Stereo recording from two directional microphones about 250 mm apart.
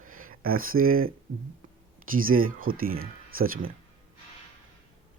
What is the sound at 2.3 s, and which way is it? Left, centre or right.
Speech, right.